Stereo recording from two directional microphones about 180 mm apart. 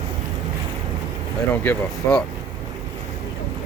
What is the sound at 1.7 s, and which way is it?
Speech, 5° left (ahead or behind).